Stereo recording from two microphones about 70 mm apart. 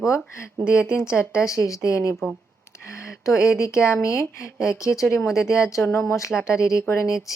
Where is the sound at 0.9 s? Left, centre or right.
Left.